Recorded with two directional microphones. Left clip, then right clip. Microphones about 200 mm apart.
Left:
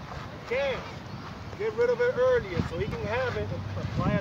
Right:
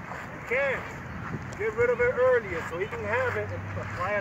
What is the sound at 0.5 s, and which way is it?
Speech, centre (ahead or behind).